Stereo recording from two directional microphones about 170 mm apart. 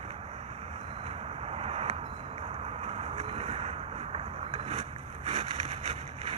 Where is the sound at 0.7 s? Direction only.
35° right (ahead or behind).